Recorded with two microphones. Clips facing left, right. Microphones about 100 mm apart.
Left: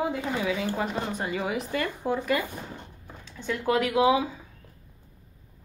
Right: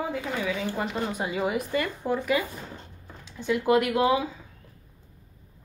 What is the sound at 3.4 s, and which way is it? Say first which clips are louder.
Speech: right 4 dB; 5° right (ahead or behind).